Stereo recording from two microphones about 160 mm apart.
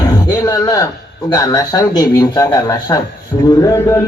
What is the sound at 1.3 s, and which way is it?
A man's voice, 25° left (ahead or behind).